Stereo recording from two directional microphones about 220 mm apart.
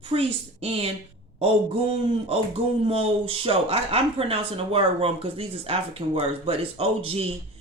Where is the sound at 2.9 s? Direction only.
25° right (ahead or behind).